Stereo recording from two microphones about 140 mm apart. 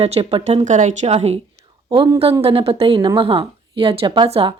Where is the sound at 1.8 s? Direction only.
30° right (ahead or behind).